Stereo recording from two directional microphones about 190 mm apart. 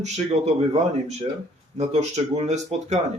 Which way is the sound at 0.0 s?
35° right (ahead or behind).